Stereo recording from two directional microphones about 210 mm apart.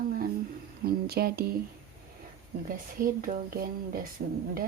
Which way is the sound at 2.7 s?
40° right (ahead or behind).